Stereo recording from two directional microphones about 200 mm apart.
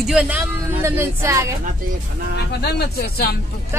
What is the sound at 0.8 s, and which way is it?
Speech, 15° right (ahead or behind).